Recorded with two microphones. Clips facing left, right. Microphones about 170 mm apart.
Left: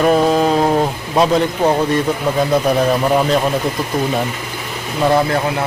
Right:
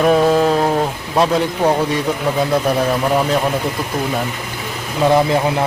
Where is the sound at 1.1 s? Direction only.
Centre (ahead or behind).